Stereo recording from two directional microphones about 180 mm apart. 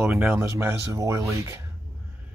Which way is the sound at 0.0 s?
5° right (ahead or behind).